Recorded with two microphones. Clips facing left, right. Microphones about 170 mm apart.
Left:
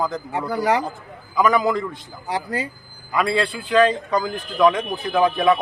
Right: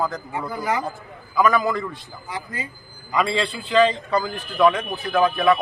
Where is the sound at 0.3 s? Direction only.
75° left (ahead or behind).